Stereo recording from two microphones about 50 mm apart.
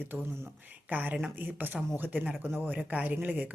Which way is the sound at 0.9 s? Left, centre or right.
Right.